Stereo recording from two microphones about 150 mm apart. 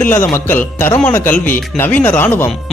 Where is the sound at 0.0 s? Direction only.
15° left (ahead or behind).